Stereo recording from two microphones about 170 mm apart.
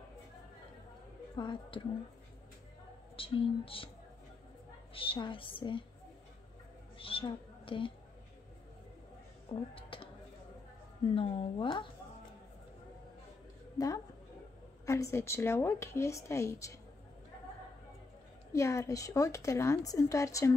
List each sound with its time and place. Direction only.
1.3 s a woman's voice: 25° left (ahead or behind)
3.2 s a woman's voice: 30° left (ahead or behind)
4.9 s a woman's voice: 30° left (ahead or behind)
7.0 s a woman's voice: 30° left (ahead or behind)
9.5 s speech: 30° left (ahead or behind)
11.1 s a woman's voice: 30° left (ahead or behind)
13.7 s speech: 20° left (ahead or behind)
18.5 s speech: 15° left (ahead or behind)